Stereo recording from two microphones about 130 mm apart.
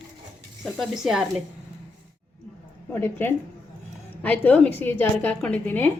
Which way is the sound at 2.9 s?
15° left (ahead or behind).